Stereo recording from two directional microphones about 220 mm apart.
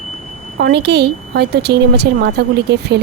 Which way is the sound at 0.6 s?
50° right (ahead or behind).